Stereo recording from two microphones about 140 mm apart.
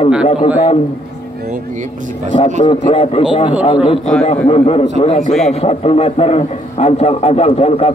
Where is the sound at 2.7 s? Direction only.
45° left (ahead or behind).